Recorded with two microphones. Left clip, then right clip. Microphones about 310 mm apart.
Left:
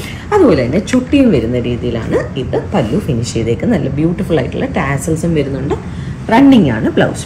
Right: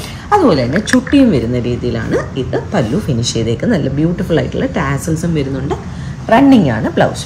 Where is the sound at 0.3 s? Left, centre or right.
Right.